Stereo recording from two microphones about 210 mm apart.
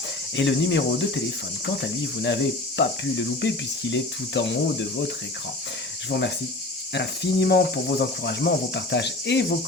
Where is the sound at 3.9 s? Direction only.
60° left (ahead or behind).